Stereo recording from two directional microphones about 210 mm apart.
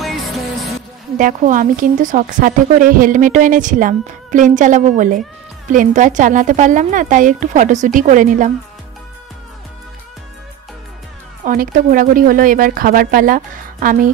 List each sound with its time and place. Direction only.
0.0 s music: centre (ahead or behind)
1.1 s a woman's voice: 40° right (ahead or behind)
11.4 s a woman's voice: 40° right (ahead or behind)